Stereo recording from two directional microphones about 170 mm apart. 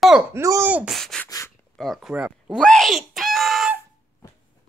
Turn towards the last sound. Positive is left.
turn(degrees=0)  # may be behind; listen again after turning